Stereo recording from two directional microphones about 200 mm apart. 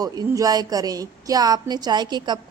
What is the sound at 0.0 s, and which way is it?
A woman's voice, 20° right (ahead or behind).